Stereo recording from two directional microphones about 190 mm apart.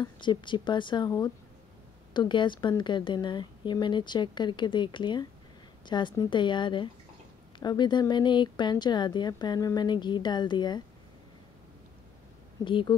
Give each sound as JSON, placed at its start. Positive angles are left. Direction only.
{"t": 0.0, "sound": "a woman's voice", "side_deg": 25}
{"t": 12.6, "sound": "a woman's voice", "side_deg": 25}